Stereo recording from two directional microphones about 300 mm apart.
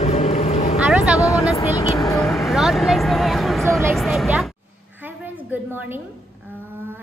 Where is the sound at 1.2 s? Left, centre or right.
Centre.